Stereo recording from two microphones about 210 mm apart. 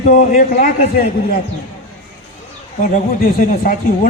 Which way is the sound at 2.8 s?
40° left (ahead or behind).